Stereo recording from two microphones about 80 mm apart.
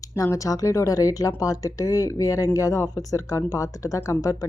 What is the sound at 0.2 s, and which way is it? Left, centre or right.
Speech, left.